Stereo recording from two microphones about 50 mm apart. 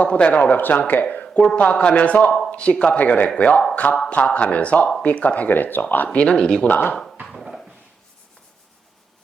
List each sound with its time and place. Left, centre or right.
0.0 s speech: left
1.0 s speech: left
5.5 s speech: left
6.1 s speech: centre
6.7 s speech: left
7.3 s a sound: centre